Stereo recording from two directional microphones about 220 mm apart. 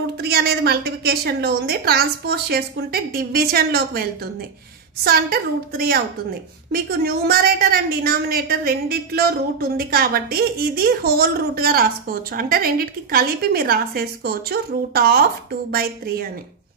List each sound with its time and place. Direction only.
0.2 s a woman's voice: 45° right (ahead or behind)
5.0 s a woman's voice: 45° right (ahead or behind)